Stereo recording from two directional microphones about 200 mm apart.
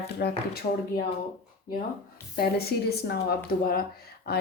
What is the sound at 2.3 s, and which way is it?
A woman's voice, 50° left (ahead or behind).